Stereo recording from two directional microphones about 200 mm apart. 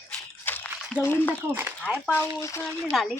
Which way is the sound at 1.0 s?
10° left (ahead or behind).